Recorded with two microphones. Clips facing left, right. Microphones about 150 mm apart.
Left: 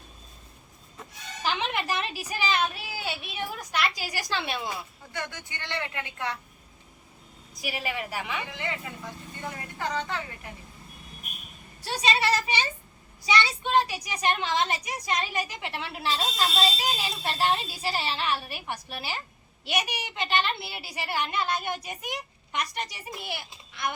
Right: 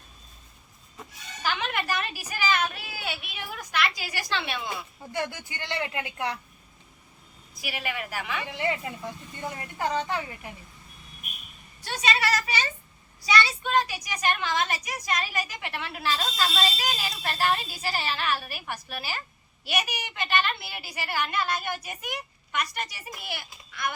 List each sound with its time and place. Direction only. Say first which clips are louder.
1.5 s a woman's voice: even; 25° left (ahead or behind)
5.1 s speech: right 5 dB; 20° right (ahead or behind)
7.6 s a woman's voice: left 1 dB; 30° left (ahead or behind)
8.5 s speech: right 5 dB; 25° right (ahead or behind)
11.8 s a woman's voice: left 1 dB; 30° left (ahead or behind)